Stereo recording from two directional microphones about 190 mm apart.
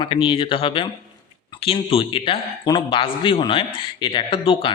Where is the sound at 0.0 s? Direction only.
25° left (ahead or behind).